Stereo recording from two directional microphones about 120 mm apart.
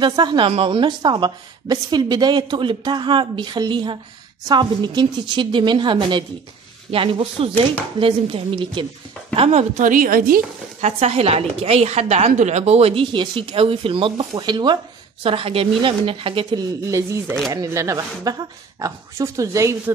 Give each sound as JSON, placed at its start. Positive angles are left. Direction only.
{"t": 0.0, "sound": "a woman's voice", "side_deg": -35}
{"t": 9.3, "sound": "a woman's voice", "side_deg": -55}
{"t": 10.8, "sound": "a woman's voice", "side_deg": -65}
{"t": 15.2, "sound": "a woman's voice", "side_deg": -50}
{"t": 16.9, "sound": "speech", "side_deg": -25}